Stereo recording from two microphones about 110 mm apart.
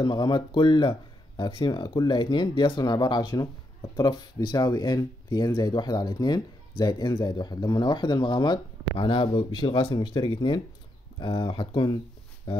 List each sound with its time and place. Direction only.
0.0 s speech: 45° left (ahead or behind)